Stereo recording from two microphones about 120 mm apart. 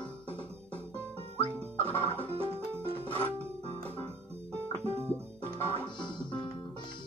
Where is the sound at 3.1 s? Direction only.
15° left (ahead or behind).